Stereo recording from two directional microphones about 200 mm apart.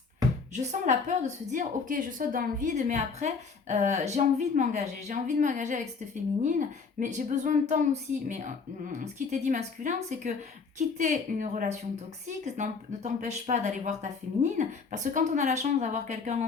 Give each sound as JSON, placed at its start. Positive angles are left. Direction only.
{"t": 0.5, "sound": "a woman's voice", "side_deg": -35}